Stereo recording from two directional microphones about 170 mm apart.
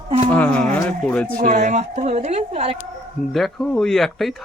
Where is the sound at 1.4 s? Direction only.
45° right (ahead or behind).